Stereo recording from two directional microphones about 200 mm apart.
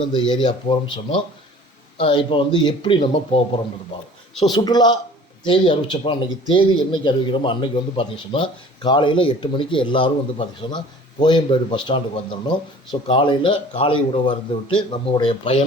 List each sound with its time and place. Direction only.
0.1 s speech: 25° left (ahead or behind)
4.5 s speech: 20° left (ahead or behind)